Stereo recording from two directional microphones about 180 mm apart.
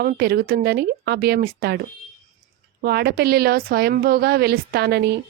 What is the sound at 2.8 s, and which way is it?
Speech, 60° right (ahead or behind).